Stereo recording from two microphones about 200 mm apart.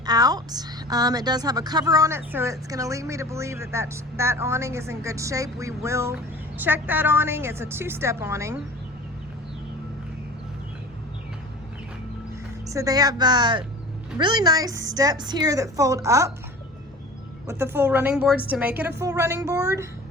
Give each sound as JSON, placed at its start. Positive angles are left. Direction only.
{"t": 0.0, "sound": "a woman's voice", "side_deg": -20}
{"t": 12.6, "sound": "a woman's voice", "side_deg": -15}
{"t": 17.4, "sound": "a woman's voice", "side_deg": -15}